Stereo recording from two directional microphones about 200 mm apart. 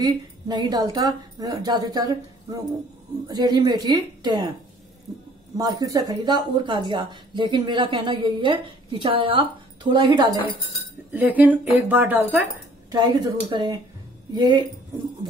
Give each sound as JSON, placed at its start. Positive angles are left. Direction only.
{"t": 0.0, "sound": "speech", "side_deg": -20}
{"t": 3.3, "sound": "speech", "side_deg": -20}
{"t": 5.6, "sound": "speech", "side_deg": -20}
{"t": 11.1, "sound": "speech", "side_deg": -10}
{"t": 12.9, "sound": "speech", "side_deg": -20}